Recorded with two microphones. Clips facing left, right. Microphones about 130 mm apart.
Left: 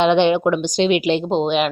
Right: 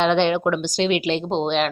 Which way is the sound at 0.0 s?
15° left (ahead or behind).